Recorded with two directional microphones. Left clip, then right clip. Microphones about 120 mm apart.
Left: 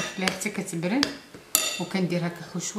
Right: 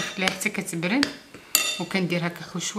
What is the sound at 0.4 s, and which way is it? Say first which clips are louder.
Speech: right 3 dB; 25° right (ahead or behind).